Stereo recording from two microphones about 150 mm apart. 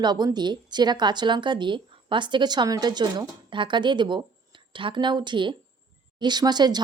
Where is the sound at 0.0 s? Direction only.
30° right (ahead or behind).